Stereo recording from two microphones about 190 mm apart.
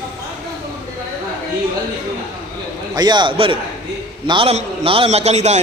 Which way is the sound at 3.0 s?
25° right (ahead or behind).